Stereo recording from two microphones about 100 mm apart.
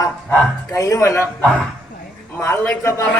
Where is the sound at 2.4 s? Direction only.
25° left (ahead or behind).